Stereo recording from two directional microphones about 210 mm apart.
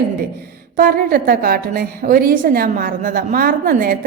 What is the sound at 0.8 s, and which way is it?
A woman's voice, 45° right (ahead or behind).